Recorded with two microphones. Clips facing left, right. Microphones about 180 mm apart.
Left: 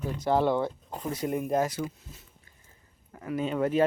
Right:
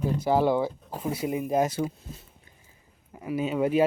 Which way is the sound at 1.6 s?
30° right (ahead or behind).